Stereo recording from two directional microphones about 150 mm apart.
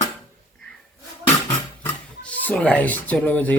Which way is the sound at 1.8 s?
10° left (ahead or behind).